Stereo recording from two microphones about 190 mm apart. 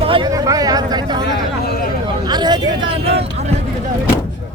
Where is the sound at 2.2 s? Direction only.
20° right (ahead or behind).